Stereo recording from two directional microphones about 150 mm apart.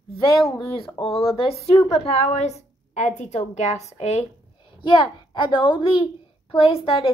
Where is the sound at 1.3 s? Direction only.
40° left (ahead or behind).